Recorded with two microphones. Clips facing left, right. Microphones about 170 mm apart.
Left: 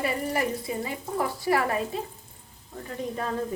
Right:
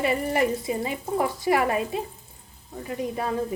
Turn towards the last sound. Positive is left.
turn(degrees=-10)  # may be behind; listen again after turning